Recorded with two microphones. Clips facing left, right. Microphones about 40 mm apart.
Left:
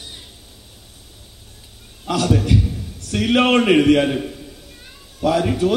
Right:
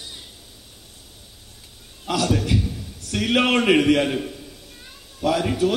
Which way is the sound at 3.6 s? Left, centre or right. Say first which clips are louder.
Left 3 dB; centre.